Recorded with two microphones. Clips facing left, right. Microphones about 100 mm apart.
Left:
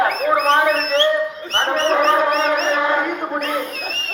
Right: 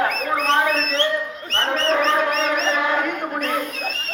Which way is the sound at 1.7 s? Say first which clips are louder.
Left 3 dB; 15° left (ahead or behind).